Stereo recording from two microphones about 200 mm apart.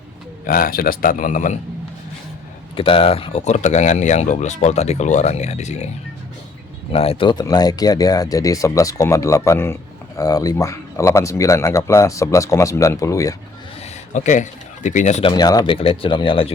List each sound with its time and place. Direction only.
0.4 s speech: 45° left (ahead or behind)
2.7 s speech: 25° left (ahead or behind)
6.9 s speech: 30° left (ahead or behind)
14.1 s speech: 40° left (ahead or behind)
15.3 s speech: 20° left (ahead or behind)